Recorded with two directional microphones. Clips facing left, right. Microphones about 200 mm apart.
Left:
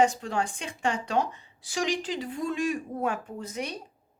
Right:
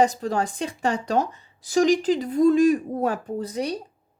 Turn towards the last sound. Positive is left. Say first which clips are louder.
# right 8 dB
turn(degrees=-35)  # may be behind; listen again after turning